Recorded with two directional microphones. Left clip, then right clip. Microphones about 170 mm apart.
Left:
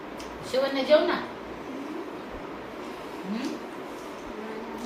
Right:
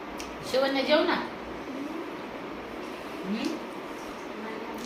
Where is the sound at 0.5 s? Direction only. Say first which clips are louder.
Left 2 dB; 30° right (ahead or behind).